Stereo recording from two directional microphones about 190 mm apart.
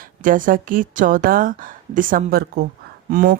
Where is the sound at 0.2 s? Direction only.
45° right (ahead or behind).